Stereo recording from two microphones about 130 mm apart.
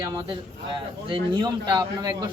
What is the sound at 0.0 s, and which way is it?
A man's voice, 30° right (ahead or behind).